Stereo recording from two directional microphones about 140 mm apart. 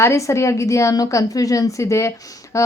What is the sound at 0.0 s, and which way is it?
A woman's voice, 20° left (ahead or behind).